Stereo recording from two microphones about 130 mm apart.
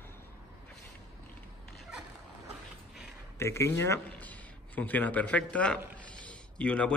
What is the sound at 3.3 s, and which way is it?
Speech, 20° left (ahead or behind).